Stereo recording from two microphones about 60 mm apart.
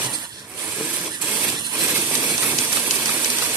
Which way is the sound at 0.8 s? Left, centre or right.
Right.